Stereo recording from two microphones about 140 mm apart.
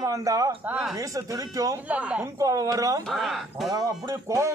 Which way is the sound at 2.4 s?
25° right (ahead or behind).